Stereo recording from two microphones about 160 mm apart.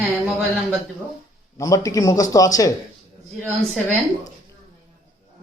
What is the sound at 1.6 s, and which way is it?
A man's voice, 20° left (ahead or behind).